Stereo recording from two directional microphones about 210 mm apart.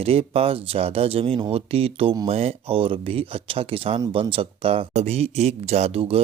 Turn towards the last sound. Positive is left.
turn(degrees=-30)  # may be behind; listen again after turning